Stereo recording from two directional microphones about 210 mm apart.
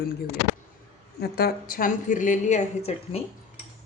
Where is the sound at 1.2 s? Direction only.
50° left (ahead or behind).